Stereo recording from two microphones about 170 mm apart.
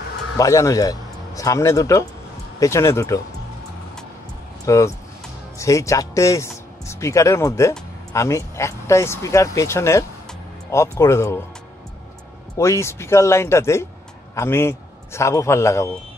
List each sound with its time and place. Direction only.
0.4 s a man's voice: 20° left (ahead or behind)
4.6 s speech: 20° left (ahead or behind)
12.5 s a man's voice: 15° left (ahead or behind)